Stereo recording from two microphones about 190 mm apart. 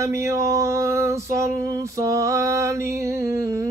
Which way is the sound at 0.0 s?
15° right (ahead or behind).